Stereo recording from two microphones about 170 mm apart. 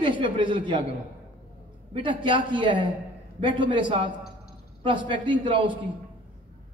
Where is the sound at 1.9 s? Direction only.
30° right (ahead or behind).